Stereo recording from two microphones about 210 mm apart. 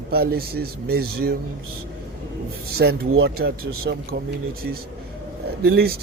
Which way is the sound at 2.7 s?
50° right (ahead or behind).